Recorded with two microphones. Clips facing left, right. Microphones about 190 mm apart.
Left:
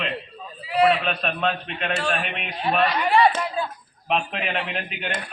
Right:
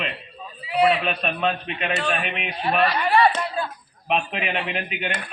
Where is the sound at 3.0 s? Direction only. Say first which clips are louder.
Even; 15° left (ahead or behind).